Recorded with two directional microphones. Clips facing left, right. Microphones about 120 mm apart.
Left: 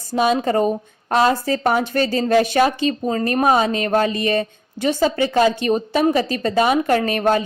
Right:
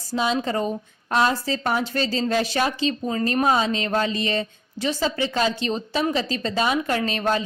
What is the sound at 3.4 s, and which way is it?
A woman's voice, 55° left (ahead or behind).